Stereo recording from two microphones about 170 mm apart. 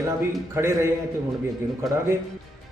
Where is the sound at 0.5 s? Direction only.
15° right (ahead or behind).